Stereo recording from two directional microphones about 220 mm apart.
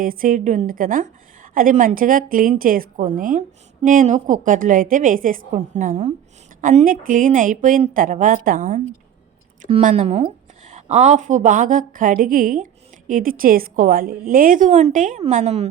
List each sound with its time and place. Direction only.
0.0 s a woman's voice: 40° right (ahead or behind)